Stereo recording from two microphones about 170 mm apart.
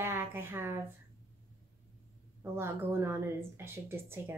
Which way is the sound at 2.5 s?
15° right (ahead or behind).